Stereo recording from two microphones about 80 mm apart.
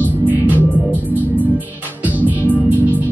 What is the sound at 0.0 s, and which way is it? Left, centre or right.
Music, right.